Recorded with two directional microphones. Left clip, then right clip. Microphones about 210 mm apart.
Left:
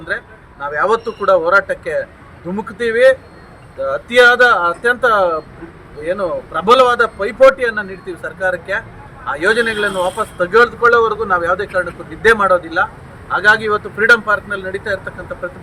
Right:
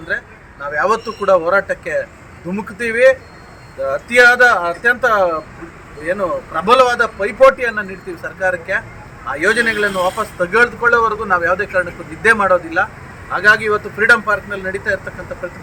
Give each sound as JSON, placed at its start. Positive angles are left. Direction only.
{"t": 0.6, "sound": "speech", "side_deg": 0}